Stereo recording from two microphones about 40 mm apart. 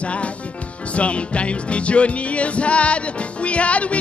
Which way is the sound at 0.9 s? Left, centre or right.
Left.